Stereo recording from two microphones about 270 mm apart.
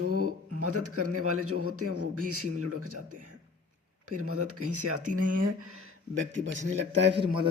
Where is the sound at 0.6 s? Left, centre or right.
Right.